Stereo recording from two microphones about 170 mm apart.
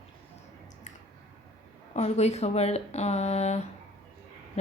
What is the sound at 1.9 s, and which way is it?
A woman's voice, 40° left (ahead or behind).